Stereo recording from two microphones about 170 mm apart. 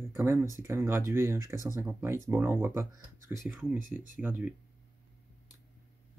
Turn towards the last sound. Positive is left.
turn(degrees=-10)  # may be behind; listen again after turning